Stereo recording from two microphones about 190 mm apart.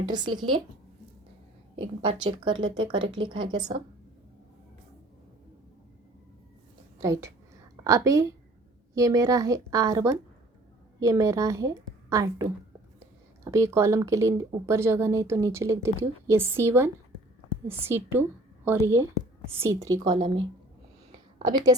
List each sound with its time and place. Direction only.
0.1 s speech: 20° right (ahead or behind)
1.7 s speech: 25° right (ahead or behind)
7.0 s speech: 15° right (ahead or behind)
21.4 s speech: 20° right (ahead or behind)